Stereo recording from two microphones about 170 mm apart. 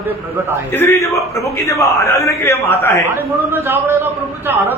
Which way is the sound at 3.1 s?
15° right (ahead or behind).